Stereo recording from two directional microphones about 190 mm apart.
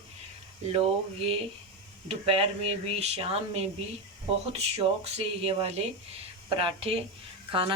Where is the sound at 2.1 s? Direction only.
30° right (ahead or behind).